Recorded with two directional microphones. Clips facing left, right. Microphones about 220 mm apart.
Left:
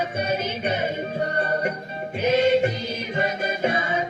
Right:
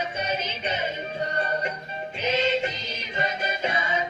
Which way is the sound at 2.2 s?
55° left (ahead or behind).